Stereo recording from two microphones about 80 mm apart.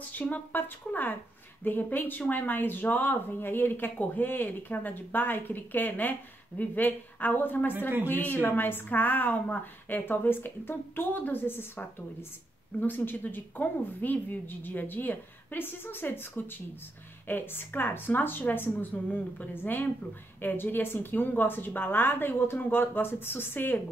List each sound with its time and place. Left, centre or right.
0.1 s speech: left